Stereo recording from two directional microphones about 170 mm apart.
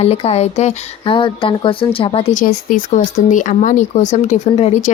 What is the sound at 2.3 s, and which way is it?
Speech, 55° left (ahead or behind).